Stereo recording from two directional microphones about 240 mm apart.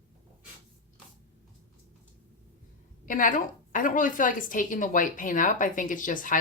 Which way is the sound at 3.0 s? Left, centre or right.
Left.